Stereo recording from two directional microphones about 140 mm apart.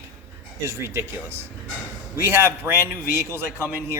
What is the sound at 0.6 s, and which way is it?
A man's voice, 20° right (ahead or behind).